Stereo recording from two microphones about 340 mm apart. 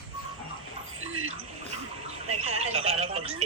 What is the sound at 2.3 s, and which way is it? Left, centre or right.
Telephone, centre.